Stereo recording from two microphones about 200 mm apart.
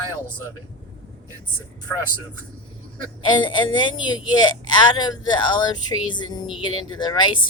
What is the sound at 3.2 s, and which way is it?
Speech, 20° left (ahead or behind).